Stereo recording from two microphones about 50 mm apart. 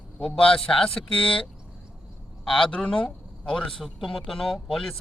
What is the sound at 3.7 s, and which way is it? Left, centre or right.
Speech, centre.